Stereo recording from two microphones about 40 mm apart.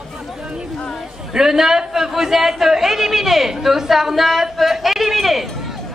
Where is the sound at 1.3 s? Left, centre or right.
Centre.